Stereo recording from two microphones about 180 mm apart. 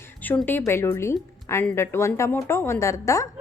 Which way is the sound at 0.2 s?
10° left (ahead or behind).